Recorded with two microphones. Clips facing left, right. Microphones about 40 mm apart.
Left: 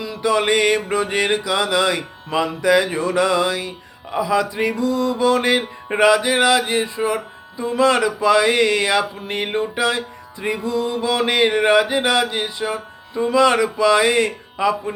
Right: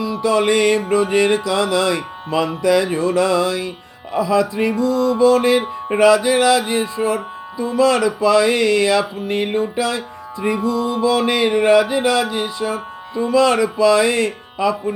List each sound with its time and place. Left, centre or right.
0.0 s music: left
4.1 s speech: left
4.6 s music: left